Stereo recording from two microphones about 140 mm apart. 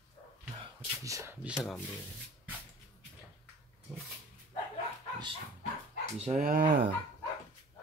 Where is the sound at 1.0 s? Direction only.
25° right (ahead or behind).